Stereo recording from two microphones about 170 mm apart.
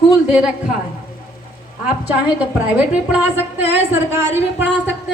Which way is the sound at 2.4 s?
10° right (ahead or behind).